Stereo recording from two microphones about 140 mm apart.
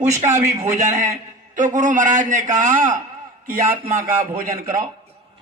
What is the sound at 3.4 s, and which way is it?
A man's voice, 85° right.